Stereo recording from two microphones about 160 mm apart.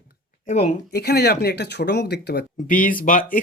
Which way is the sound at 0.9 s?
90° left.